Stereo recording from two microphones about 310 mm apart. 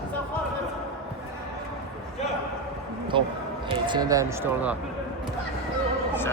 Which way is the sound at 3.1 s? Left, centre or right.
Centre.